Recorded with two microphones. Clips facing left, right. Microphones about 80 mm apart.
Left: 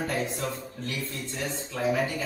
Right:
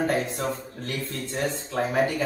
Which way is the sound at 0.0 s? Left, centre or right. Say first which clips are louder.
Right 4 dB; right.